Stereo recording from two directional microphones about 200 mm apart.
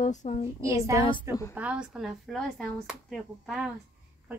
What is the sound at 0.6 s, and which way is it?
A child's voice, 15° right (ahead or behind).